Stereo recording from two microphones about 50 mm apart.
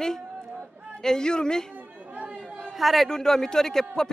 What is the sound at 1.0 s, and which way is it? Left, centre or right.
Speech, centre.